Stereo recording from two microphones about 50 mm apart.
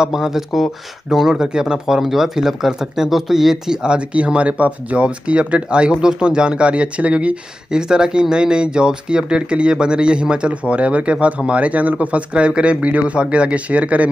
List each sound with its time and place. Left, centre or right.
0.0 s speech: centre; by 14.0 s right